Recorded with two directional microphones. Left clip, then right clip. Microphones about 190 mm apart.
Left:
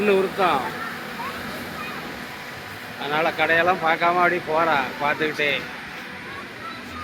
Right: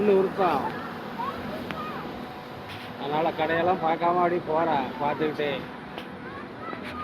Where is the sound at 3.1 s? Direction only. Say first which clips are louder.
Left 5 dB; centre (ahead or behind).